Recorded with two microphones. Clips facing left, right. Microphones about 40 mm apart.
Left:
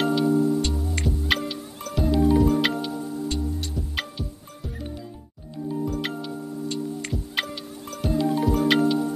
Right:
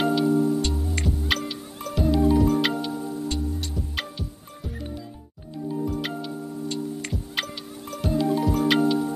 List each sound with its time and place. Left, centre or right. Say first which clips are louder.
0.0 s music: even; centre
5.9 s music: even; centre